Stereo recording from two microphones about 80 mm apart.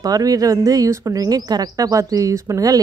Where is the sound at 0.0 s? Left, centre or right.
Right.